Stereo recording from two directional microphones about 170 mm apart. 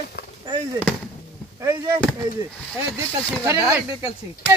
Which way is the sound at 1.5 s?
20° right (ahead or behind).